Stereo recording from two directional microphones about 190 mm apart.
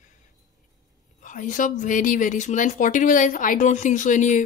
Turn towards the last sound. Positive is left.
turn(degrees=40)  # may be behind; listen again after turning